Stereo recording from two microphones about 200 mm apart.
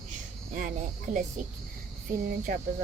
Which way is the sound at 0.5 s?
40° right (ahead or behind).